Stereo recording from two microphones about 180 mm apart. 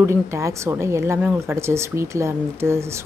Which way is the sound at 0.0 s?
15° right (ahead or behind).